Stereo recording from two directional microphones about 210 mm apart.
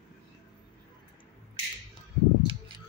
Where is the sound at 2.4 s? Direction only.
20° right (ahead or behind).